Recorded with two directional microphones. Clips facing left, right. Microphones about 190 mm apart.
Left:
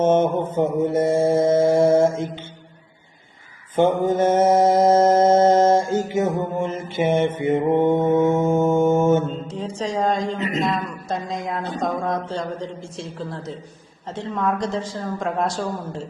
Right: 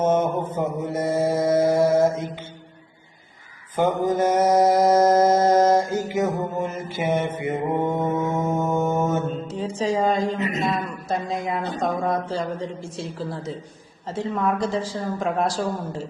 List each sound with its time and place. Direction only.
0.0 s mantra: 25° left (ahead or behind)
3.8 s mantra: 25° left (ahead or behind)
8.0 s music: 25° left (ahead or behind)
9.7 s a woman's voice: 5° right (ahead or behind)
10.7 s a sound: 5° right (ahead or behind)
11.4 s a woman's voice: 5° right (ahead or behind)